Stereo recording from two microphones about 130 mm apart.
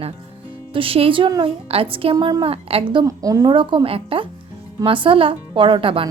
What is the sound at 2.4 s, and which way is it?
Speech, 50° right (ahead or behind).